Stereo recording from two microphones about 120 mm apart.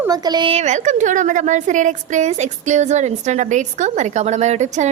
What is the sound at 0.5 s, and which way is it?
A woman's voice, 80° right.